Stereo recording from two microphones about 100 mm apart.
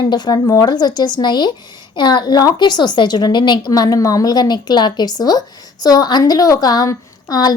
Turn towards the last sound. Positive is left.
turn(degrees=40)  # may be behind; listen again after turning